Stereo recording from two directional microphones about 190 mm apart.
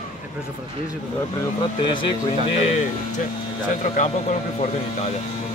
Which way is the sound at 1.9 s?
25° left (ahead or behind).